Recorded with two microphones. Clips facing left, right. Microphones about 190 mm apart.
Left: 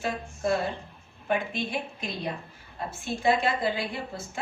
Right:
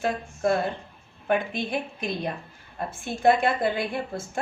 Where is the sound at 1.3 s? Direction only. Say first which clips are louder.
Right 3 dB; 55° right (ahead or behind).